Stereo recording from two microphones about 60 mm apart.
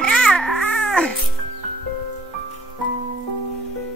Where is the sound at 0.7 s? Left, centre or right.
Centre.